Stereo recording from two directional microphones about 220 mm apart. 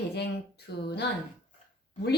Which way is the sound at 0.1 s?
50° left (ahead or behind).